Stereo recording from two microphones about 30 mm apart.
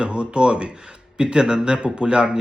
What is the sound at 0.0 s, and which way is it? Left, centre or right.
A man's voice, right.